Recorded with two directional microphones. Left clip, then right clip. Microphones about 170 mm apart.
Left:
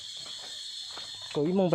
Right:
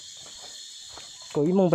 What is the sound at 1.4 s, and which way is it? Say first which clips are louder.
Speech: right 5 dB; 25° right (ahead or behind).